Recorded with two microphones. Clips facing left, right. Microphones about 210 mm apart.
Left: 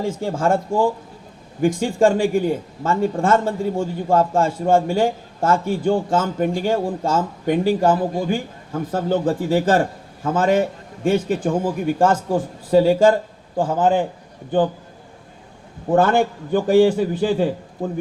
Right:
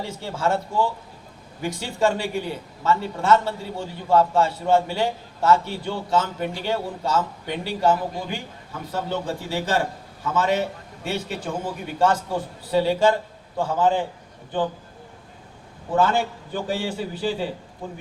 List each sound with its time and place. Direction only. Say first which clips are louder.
0.0 s a man's voice: left 5 dB; 50° left (ahead or behind)
15.9 s a man's voice: left 5 dB; 50° left (ahead or behind)